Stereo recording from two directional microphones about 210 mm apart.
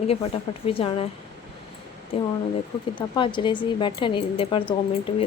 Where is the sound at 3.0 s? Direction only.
25° left (ahead or behind).